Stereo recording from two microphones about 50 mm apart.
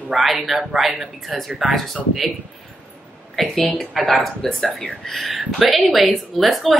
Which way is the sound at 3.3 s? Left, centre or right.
Centre.